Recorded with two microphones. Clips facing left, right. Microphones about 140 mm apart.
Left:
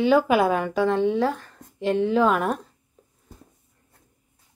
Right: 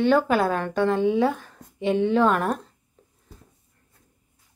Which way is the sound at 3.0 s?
5° left (ahead or behind).